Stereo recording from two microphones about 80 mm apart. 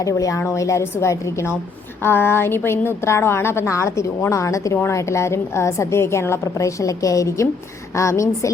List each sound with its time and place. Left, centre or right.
0.0 s a woman's voice: left